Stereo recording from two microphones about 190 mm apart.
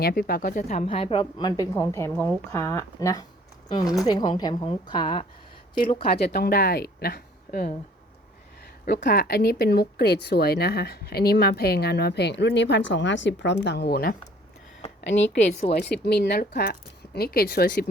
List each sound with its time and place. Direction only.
0.0 s a woman's voice: 55° left (ahead or behind); by 5.2 s 25° left (ahead or behind)
6.1 s speech: 60° left (ahead or behind)
9.0 s speech: 50° left (ahead or behind); by 13.6 s 70° left (ahead or behind)
13.7 s speech: 60° left (ahead or behind)
15.0 s a woman's voice: 70° left (ahead or behind)
15.7 s speech: 60° left (ahead or behind)